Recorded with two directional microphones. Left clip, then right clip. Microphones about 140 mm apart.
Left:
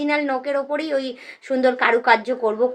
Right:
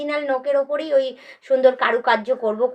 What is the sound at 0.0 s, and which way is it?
Speech, 30° left (ahead or behind).